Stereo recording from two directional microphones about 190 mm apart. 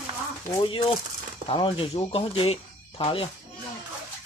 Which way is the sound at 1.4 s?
30° left (ahead or behind).